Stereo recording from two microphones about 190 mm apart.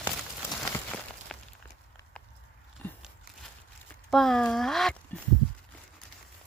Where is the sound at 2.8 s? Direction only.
10° left (ahead or behind).